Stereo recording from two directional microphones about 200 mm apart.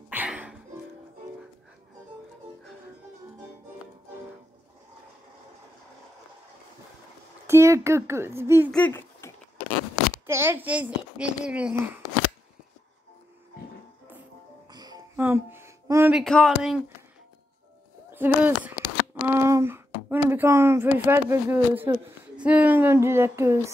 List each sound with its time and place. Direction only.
0.1 s music: 10° right (ahead or behind)
7.4 s a child's voice: 15° right (ahead or behind)
8.7 s a sound: 10° left (ahead or behind)
10.2 s a child's voice: 10° right (ahead or behind)
14.7 s music: 20° right (ahead or behind)
15.1 s speech: 10° right (ahead or behind)
18.1 s speech: 10° right (ahead or behind)
19.2 s a sound: 10° right (ahead or behind)
22.4 s a child's voice: 5° right (ahead or behind)